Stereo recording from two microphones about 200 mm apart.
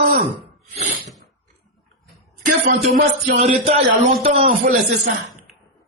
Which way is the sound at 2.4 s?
40° right (ahead or behind).